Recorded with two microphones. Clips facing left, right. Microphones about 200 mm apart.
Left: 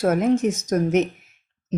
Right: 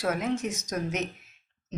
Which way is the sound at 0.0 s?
50° left (ahead or behind).